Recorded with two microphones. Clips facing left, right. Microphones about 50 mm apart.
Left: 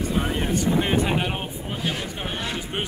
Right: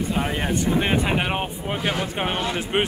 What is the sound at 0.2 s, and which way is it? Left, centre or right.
Speech, right.